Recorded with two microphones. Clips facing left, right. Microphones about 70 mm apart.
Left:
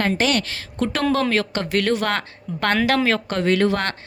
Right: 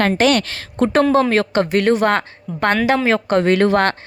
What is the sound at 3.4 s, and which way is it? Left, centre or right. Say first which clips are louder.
Speech: right 5 dB; right.